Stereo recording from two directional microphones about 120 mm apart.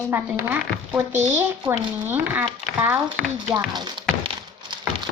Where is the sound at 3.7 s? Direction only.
35° right (ahead or behind).